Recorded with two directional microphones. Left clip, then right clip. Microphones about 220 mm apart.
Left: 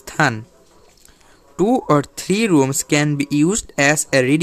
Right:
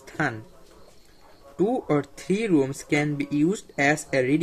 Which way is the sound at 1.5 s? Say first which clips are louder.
Left 8 dB; 45° left (ahead or behind).